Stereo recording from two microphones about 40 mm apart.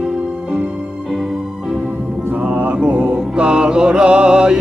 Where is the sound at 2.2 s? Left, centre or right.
Right.